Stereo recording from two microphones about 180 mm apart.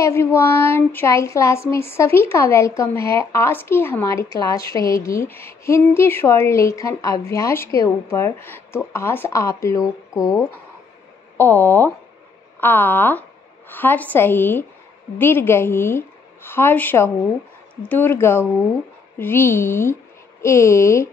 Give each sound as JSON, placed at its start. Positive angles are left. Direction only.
{"t": 0.0, "sound": "a woman's voice", "side_deg": 15}